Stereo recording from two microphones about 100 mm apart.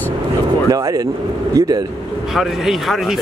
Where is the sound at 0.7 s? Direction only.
35° right (ahead or behind).